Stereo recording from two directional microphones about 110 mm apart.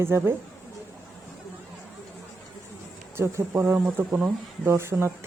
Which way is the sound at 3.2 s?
20° right (ahead or behind).